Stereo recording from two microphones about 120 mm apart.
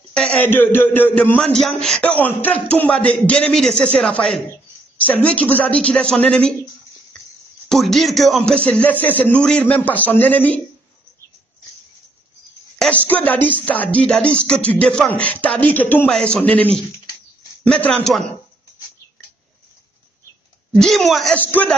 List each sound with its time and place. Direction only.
0.1 s music: 10° left (ahead or behind)
7.6 s speech: 5° left (ahead or behind)
9.0 s music: 15° left (ahead or behind)
13.0 s music: 15° left (ahead or behind)
17.6 s music: 10° left (ahead or behind)
20.7 s speech: 5° left (ahead or behind)
21.4 s music: 15° left (ahead or behind)